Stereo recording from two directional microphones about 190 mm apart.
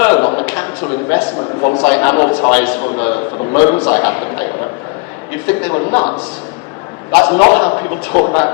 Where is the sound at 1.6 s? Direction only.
25° left (ahead or behind).